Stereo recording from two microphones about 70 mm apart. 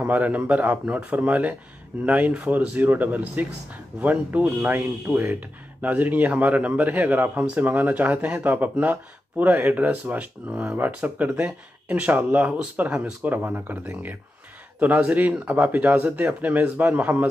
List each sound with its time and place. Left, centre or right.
0.0 s speech: right